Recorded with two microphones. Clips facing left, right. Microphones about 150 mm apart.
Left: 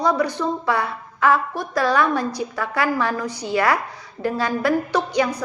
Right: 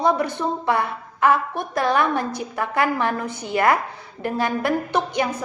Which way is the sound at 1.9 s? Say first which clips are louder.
Left 1 dB; 55° right (ahead or behind).